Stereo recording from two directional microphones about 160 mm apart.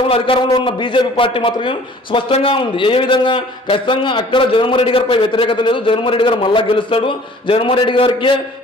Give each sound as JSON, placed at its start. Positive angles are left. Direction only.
{"t": 0.1, "sound": "a man's voice", "side_deg": 35}